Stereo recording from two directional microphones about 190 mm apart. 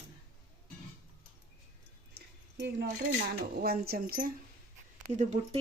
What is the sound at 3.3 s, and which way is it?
Speech, 55° right (ahead or behind).